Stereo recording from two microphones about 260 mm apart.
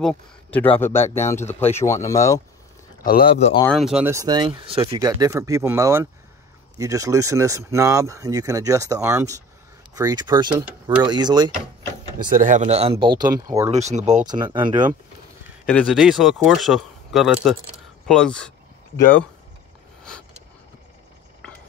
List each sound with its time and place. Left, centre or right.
0.0 s speech: centre
1.0 s speech: left
1.5 s speech: centre
3.0 s speech: left
3.3 s speech: left
3.6 s speech: centre
12.3 s speech: right; by 13.7 s centre
13.7 s speech: right
14.2 s speech: centre
15.6 s speech: centre